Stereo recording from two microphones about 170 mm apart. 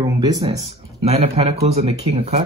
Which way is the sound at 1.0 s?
35° right (ahead or behind).